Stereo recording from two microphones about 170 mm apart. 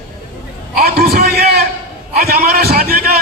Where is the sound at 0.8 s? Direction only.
65° right (ahead or behind).